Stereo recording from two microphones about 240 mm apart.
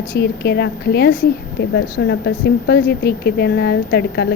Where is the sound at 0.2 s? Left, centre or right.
Left.